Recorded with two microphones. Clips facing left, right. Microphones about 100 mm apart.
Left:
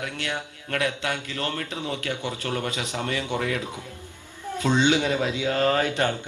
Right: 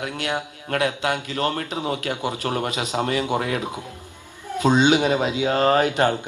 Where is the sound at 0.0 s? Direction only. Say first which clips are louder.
Right 4 dB; 30° right (ahead or behind).